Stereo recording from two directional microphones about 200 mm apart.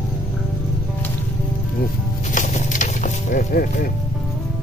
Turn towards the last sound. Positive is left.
turn(degrees=45)  # may be behind; listen again after turning